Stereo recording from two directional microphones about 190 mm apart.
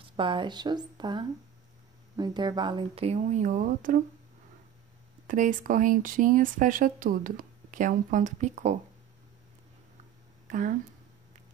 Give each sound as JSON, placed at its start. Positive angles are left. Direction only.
{"t": 0.1, "sound": "speech", "side_deg": -25}
{"t": 5.2, "sound": "speech", "side_deg": -45}